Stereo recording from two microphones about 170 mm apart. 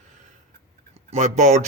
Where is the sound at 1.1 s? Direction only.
45° right (ahead or behind).